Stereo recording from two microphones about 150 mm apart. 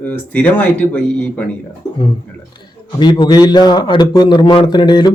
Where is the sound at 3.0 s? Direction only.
30° left (ahead or behind).